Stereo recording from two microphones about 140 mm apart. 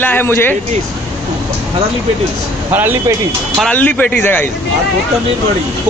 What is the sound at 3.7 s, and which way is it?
Speech, 10° left (ahead or behind).